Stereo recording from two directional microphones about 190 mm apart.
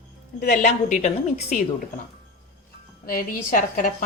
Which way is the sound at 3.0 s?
45° left (ahead or behind).